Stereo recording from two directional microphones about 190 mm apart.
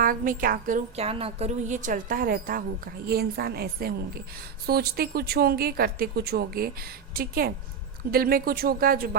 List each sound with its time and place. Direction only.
0.0 s a woman's voice: 45° right (ahead or behind)